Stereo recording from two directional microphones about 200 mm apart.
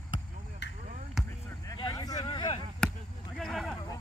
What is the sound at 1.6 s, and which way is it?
Vehicle, 20° left (ahead or behind).